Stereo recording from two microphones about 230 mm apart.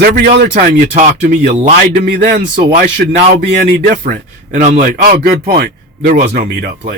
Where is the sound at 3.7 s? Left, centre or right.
Right.